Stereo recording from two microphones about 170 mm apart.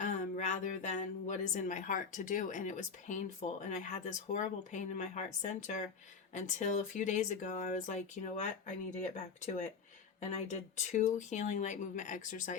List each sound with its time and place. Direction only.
0.0 s speech: 45° left (ahead or behind)